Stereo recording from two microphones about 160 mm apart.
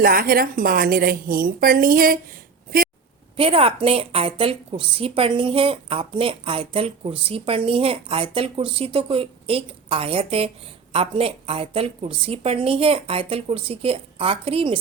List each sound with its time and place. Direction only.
0.0 s a woman's voice: 65° right (ahead or behind)
3.3 s a woman's voice: 35° right (ahead or behind)